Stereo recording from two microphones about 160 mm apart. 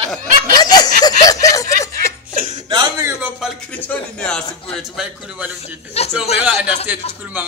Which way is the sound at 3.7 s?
10° left (ahead or behind).